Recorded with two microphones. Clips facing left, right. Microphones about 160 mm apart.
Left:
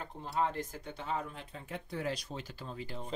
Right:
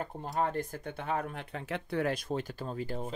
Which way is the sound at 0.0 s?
50° right (ahead or behind).